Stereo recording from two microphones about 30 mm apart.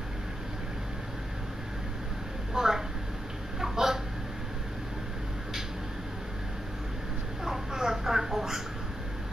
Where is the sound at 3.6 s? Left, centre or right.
Centre.